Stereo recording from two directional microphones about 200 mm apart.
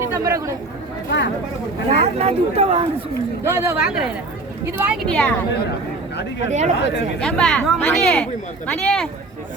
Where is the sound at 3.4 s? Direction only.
15° right (ahead or behind).